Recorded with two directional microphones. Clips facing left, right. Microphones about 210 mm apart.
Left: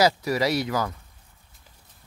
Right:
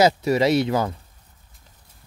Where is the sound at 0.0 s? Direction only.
25° right (ahead or behind).